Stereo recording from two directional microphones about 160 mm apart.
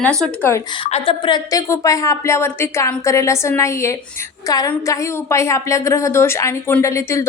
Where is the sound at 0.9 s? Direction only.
35° left (ahead or behind).